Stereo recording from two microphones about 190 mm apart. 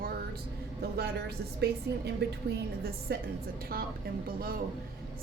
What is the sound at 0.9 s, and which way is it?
A woman's voice, 55° right (ahead or behind).